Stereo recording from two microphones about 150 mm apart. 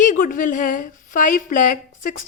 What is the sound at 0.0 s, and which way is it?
A woman's voice, 60° left (ahead or behind).